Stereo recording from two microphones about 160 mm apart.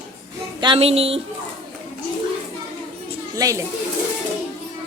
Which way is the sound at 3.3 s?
20° right (ahead or behind).